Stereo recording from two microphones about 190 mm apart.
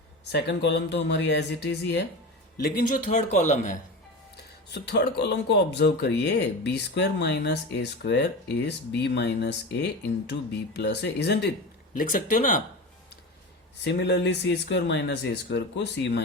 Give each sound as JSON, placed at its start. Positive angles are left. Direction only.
{"t": 0.3, "sound": "speech", "side_deg": 60}
{"t": 2.6, "sound": "a man's voice", "side_deg": 50}
{"t": 4.9, "sound": "speech", "side_deg": 60}
{"t": 11.9, "sound": "speech", "side_deg": 45}
{"t": 13.8, "sound": "speech", "side_deg": 65}